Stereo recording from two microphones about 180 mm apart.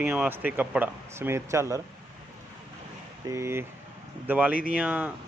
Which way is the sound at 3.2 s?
15° right (ahead or behind).